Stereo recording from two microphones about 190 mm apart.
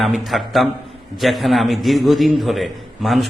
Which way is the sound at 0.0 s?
Centre (ahead or behind).